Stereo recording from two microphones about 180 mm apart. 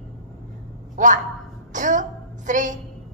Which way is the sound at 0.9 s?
45° right (ahead or behind).